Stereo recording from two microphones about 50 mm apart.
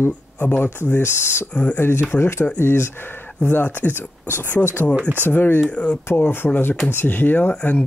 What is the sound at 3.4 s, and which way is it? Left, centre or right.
Speech, left.